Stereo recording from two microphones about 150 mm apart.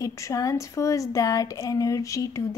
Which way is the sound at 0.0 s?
20° left (ahead or behind).